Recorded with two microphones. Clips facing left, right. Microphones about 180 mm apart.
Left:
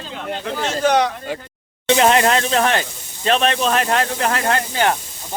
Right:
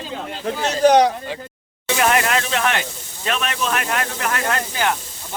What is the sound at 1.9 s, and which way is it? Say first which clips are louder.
Speech: left 4 dB; 25° left (ahead or behind).